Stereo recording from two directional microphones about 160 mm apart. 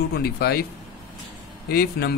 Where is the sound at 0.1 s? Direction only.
80° left.